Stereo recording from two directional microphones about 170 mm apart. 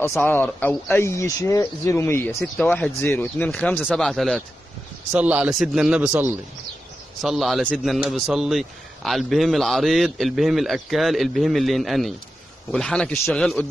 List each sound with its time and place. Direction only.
0.1 s a man's voice: 10° left (ahead or behind)